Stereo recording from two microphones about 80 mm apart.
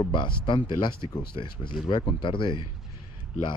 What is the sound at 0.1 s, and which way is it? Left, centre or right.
Speech, left.